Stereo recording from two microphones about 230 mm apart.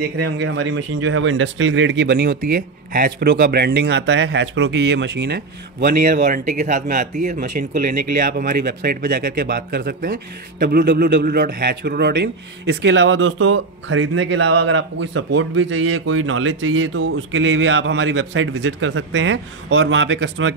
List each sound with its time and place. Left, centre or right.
0.4 s speech: right